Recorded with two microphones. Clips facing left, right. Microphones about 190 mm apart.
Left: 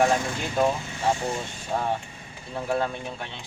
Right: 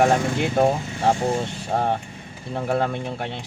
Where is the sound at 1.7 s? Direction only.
55° right (ahead or behind).